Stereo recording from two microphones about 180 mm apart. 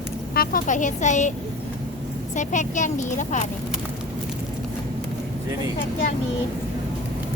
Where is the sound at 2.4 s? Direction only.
40° left (ahead or behind).